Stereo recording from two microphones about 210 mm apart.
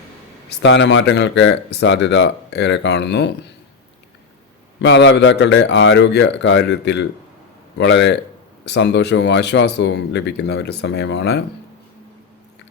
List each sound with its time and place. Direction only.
0.6 s speech: 55° left (ahead or behind)
4.8 s speech: 60° left (ahead or behind)